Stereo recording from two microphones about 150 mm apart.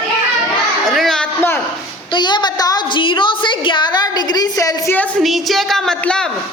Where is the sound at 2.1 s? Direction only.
30° left (ahead or behind).